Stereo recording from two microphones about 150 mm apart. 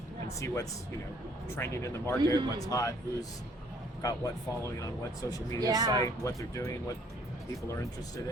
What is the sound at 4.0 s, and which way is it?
A man's voice, 25° left (ahead or behind).